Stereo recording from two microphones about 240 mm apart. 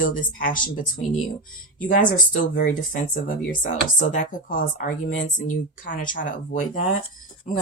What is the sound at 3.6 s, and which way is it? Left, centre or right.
Speech, left.